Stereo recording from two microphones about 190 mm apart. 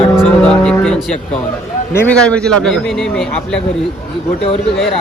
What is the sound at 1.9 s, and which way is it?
A man's voice, 5° left (ahead or behind).